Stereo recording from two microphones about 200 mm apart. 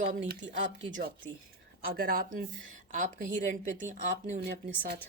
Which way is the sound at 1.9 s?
45° right (ahead or behind).